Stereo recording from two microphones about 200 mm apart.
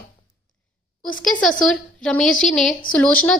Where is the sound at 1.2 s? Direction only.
5° left (ahead or behind).